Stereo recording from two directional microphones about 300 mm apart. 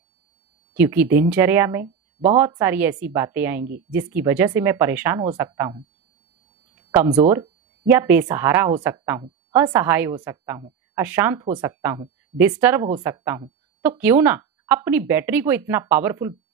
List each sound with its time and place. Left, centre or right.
0.7 s speech: centre
6.7 s a sound: centre
7.1 s speech: centre